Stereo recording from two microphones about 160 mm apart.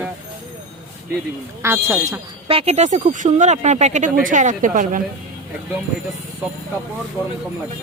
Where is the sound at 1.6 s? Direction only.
15° right (ahead or behind).